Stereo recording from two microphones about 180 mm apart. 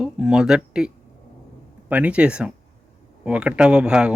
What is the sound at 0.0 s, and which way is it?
Speech, 5° right (ahead or behind).